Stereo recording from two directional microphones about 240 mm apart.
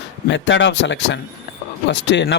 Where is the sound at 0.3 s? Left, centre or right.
Left.